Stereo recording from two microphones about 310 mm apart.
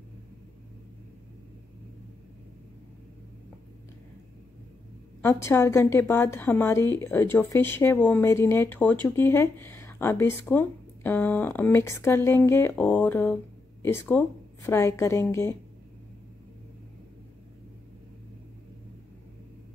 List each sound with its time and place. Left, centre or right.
5.2 s a woman's voice: centre